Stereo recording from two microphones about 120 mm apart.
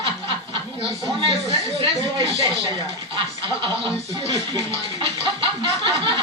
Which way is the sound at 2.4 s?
35° right (ahead or behind).